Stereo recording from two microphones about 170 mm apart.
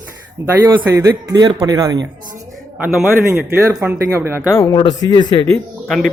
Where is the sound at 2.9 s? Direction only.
10° right (ahead or behind).